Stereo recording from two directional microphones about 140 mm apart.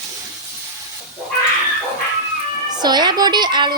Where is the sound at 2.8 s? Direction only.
30° right (ahead or behind).